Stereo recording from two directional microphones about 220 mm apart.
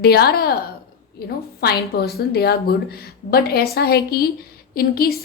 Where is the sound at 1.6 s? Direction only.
45° left (ahead or behind).